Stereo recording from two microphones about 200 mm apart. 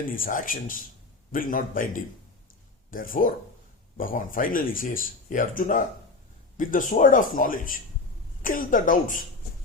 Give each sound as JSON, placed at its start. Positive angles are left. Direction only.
{"t": 0.1, "sound": "speech", "side_deg": 45}